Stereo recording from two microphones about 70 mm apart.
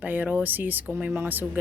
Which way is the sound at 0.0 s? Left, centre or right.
Right.